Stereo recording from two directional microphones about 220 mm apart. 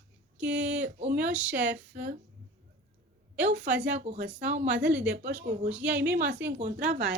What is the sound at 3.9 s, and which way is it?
Speech, 30° right (ahead or behind).